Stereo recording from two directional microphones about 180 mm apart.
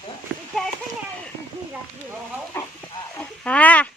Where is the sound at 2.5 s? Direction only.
15° left (ahead or behind).